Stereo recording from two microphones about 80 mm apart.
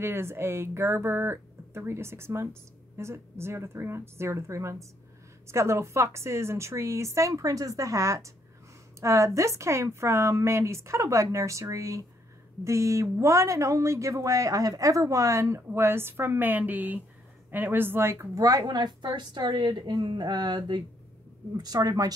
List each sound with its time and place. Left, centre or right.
0.0 s a woman's voice: right
21.5 s a woman's voice: right